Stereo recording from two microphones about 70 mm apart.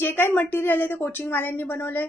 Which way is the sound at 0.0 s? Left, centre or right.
Left.